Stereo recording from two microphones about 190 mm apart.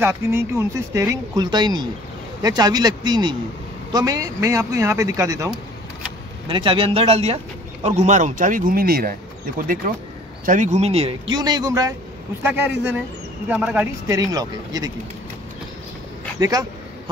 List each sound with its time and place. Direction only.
0.0 s speech: 10° right (ahead or behind)
6.4 s speech: 25° right (ahead or behind); by 9.1 s 50° right (ahead or behind)
10.4 s speech: 40° right (ahead or behind); by 14.9 s 20° right (ahead or behind)
16.3 s speech: 20° right (ahead or behind)